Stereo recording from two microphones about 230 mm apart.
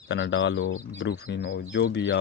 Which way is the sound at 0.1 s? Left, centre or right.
Left.